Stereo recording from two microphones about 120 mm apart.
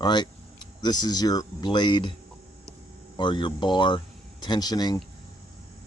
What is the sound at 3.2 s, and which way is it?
Speech, 40° left (ahead or behind).